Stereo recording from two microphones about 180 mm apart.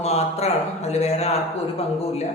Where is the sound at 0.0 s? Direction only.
35° left (ahead or behind).